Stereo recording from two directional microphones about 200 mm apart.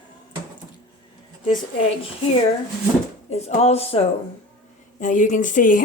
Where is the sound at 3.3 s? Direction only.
30° left (ahead or behind).